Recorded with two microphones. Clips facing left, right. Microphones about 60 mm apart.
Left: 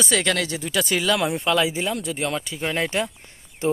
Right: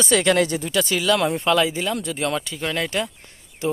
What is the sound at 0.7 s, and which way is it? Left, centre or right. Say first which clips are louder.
Speech: right 2 dB; centre.